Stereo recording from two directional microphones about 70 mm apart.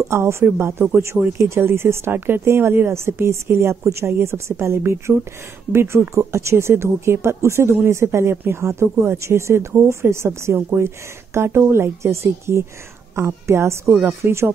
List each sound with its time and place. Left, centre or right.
0.0 s speech: right